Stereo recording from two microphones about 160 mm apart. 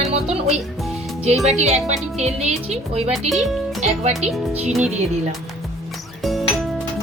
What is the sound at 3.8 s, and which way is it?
Speech, 45° right (ahead or behind).